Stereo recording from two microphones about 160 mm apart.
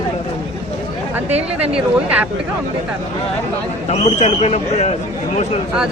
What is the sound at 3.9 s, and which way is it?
Speech, 45° left (ahead or behind).